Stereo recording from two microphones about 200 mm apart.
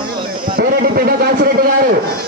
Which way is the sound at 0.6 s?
50° right (ahead or behind).